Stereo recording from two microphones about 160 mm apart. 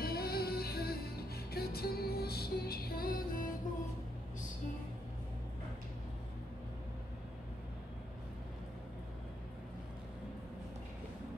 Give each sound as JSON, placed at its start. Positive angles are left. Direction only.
{"t": 0.0, "sound": "music", "side_deg": 70}